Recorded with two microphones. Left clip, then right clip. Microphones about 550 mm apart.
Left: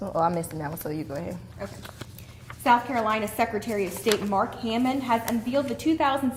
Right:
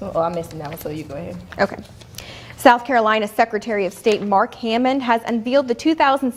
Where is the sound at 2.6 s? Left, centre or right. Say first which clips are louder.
Right 8 dB; right.